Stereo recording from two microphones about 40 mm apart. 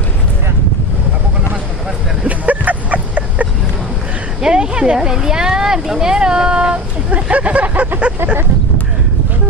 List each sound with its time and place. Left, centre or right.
2.2 s a sound: right
4.4 s speech: right
7.1 s speech: right